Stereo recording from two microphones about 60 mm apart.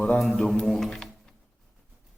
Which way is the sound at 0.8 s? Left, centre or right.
Centre.